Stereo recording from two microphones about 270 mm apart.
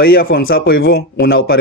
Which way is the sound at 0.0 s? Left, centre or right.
Left.